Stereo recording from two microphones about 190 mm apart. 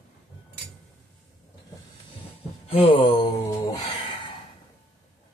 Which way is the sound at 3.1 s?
20° left (ahead or behind).